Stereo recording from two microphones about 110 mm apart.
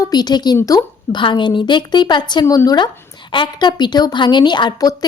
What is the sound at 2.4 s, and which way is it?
A woman's voice, 30° left (ahead or behind).